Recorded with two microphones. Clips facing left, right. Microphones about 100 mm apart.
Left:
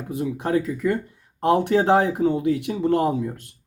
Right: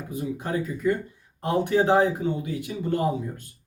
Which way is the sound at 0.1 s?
70° left (ahead or behind).